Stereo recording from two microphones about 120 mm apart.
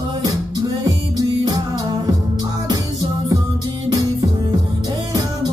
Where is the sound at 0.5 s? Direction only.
35° right (ahead or behind).